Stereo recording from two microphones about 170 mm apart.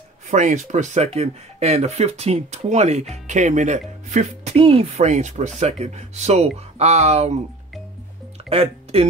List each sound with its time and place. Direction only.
0.3 s speech: 45° right (ahead or behind)
8.5 s speech: 35° right (ahead or behind)